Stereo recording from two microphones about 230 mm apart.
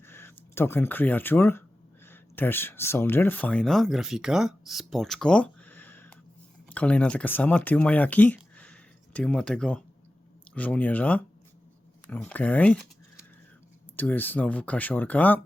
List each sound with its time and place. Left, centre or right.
0.0 s speech: centre